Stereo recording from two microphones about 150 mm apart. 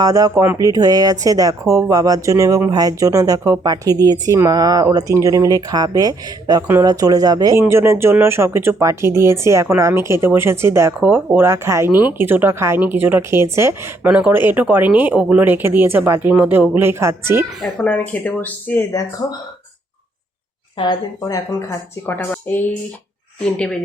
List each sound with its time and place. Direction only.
0.0 s speech: 25° right (ahead or behind)
17.6 s speech: 5° left (ahead or behind)
20.7 s a woman's voice: 25° left (ahead or behind)
22.0 s speech: 15° left (ahead or behind)